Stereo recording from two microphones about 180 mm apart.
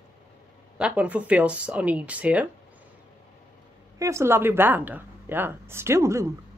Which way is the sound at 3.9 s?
15° right (ahead or behind).